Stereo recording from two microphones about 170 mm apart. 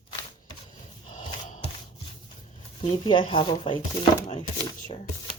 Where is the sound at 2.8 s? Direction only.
30° left (ahead or behind).